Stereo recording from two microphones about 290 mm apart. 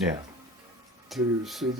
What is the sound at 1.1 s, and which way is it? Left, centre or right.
Speech, centre.